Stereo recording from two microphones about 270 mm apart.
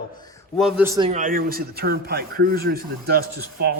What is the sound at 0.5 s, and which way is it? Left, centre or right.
Speech, centre.